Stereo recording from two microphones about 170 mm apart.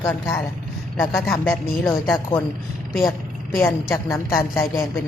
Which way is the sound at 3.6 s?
15° left (ahead or behind).